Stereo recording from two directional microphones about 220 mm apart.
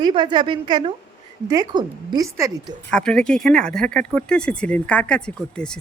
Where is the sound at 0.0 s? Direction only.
20° right (ahead or behind).